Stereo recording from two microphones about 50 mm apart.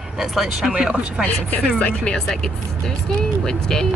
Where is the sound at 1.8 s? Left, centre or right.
Left.